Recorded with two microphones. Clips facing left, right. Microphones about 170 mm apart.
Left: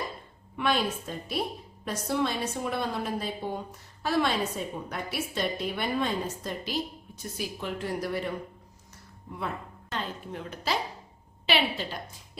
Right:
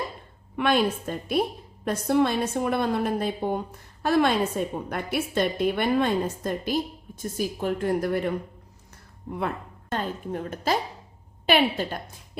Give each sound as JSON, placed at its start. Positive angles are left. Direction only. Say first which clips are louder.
{"t": 0.5, "sound": "a woman's voice", "louder": "right 5 dB", "side_deg": -60}
{"t": 9.9, "sound": "a woman's voice", "louder": "right 6 dB", "side_deg": -45}